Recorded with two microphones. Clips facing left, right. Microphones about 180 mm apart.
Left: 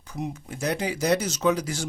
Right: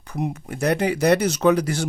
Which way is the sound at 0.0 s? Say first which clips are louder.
Right 5 dB; 60° right (ahead or behind).